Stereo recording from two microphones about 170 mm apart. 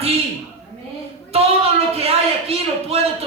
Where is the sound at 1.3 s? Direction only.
35° right (ahead or behind).